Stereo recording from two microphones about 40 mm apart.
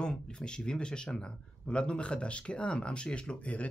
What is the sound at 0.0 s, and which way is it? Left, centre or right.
A man's voice, left.